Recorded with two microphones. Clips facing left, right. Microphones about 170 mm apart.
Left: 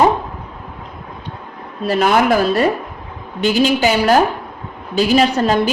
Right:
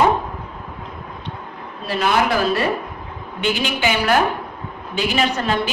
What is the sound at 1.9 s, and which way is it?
Speech, 45° left (ahead or behind).